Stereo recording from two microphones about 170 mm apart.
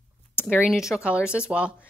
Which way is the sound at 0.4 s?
10° left (ahead or behind).